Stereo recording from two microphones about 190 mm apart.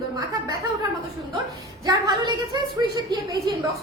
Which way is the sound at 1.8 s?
20° right (ahead or behind).